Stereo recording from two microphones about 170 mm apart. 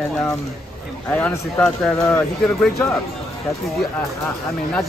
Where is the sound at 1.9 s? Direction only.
15° left (ahead or behind).